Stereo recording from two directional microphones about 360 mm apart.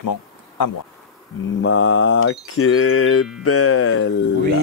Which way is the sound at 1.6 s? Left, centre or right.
Left.